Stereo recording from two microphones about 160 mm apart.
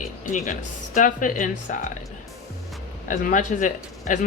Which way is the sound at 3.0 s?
55° left (ahead or behind).